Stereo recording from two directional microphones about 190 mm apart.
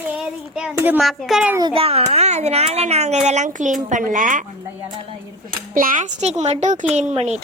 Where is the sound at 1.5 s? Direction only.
25° right (ahead or behind); by 4.4 s 40° right (ahead or behind).